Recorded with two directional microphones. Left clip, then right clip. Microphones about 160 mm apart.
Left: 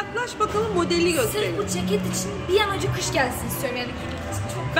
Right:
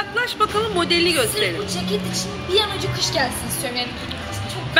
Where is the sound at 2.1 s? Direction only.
45° left (ahead or behind).